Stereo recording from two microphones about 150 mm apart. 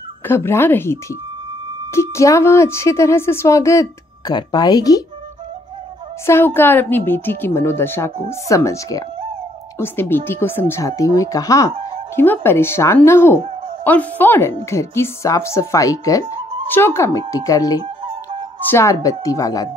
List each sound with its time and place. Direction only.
0.3 s speech: 15° left (ahead or behind)
2.0 s speech: 20° left (ahead or behind)
6.2 s speech: 15° left (ahead or behind)